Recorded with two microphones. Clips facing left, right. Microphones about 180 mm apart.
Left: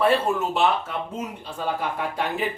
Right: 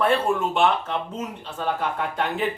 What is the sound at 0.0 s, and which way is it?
Speech, 5° left (ahead or behind).